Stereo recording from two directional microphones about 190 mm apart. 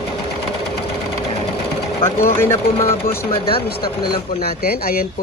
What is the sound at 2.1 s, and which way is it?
Speech, 15° left (ahead or behind).